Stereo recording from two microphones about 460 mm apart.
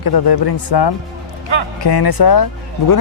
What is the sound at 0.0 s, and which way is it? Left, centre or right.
Speech, left.